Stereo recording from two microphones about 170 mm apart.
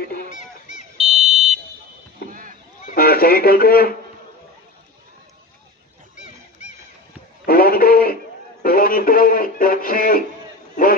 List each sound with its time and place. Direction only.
0.9 s fire alarm: centre (ahead or behind)
2.2 s rowboat: 55° right (ahead or behind)
3.0 s a man's voice: 60° left (ahead or behind)
7.4 s a sound: 60° left (ahead or behind)
8.6 s radio: 60° left (ahead or behind)